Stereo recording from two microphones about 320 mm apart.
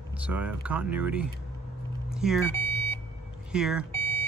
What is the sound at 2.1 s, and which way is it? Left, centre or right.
Vehicle, centre.